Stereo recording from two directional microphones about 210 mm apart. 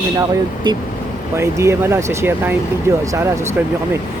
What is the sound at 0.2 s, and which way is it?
Speech, 20° right (ahead or behind).